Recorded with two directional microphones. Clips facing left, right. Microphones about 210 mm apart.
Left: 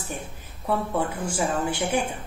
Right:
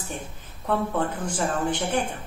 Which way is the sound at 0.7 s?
10° left (ahead or behind).